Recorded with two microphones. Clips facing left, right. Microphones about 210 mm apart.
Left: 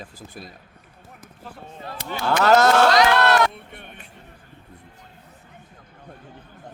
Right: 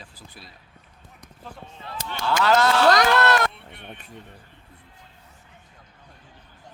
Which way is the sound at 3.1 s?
45° left (ahead or behind).